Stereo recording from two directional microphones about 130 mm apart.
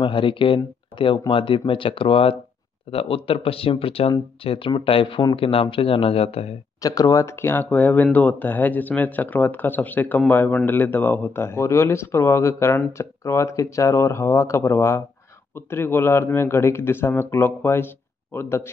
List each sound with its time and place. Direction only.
0.0 s speech: 40° left (ahead or behind)
6.8 s speech: 25° left (ahead or behind)